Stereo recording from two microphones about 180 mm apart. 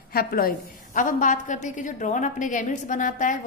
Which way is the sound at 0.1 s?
55° left (ahead or behind).